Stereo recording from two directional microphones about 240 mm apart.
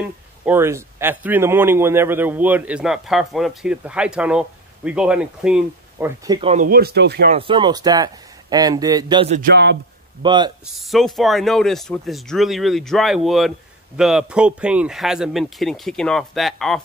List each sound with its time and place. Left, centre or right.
0.5 s a man's voice: centre
6.5 s speech: right
7.2 s a man's voice: right
9.4 s a man's voice: right
10.2 s speech: centre
10.7 s speech: centre